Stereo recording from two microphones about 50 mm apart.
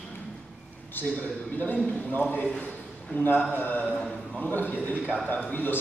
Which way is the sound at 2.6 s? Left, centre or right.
Left.